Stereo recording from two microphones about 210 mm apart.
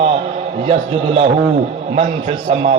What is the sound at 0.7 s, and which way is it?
Speech, 30° right (ahead or behind).